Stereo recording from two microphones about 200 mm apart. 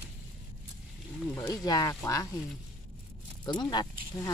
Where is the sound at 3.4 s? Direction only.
20° left (ahead or behind).